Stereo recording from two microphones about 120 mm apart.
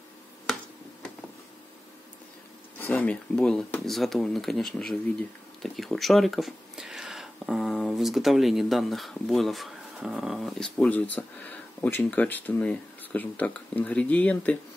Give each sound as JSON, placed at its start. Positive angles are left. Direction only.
{"t": 2.8, "sound": "speech", "side_deg": 10}
{"t": 10.8, "sound": "speech", "side_deg": 15}